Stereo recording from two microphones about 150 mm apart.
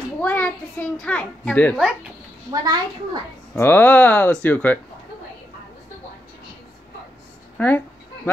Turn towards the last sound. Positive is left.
turn(degrees=10)  # may be behind; listen again after turning